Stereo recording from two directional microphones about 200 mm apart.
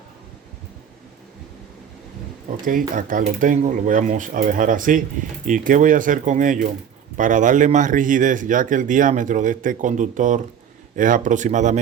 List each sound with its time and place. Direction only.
2.6 s speech: 45° right (ahead or behind)